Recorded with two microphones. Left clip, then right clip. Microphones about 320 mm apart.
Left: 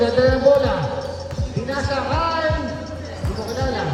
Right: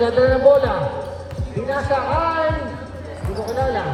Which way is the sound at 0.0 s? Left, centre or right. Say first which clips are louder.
Right 2 dB; centre.